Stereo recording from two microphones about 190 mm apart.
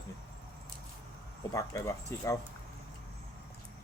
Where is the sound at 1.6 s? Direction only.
15° left (ahead or behind).